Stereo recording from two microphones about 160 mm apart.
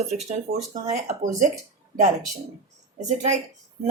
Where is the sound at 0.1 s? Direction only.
45° right (ahead or behind).